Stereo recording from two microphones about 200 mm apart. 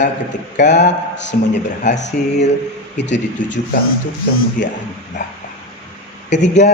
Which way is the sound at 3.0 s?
60° left (ahead or behind).